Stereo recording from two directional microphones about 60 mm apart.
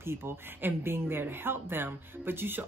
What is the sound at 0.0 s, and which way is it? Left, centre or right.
Speech, right.